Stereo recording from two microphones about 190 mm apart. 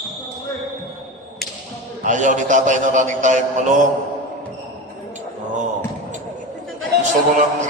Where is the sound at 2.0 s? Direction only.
40° right (ahead or behind).